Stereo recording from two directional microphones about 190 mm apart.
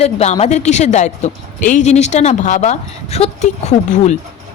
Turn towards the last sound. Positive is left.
turn(degrees=35)  # may be behind; listen again after turning